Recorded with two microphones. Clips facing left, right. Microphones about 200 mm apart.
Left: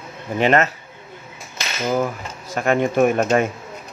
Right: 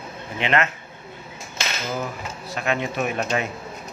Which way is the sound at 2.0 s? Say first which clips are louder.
Left 6 dB; 50° left (ahead or behind).